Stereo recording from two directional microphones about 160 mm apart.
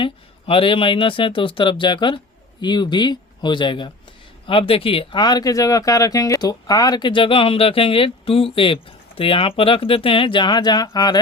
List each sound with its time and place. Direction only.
0.0 s speech: 35° left (ahead or behind)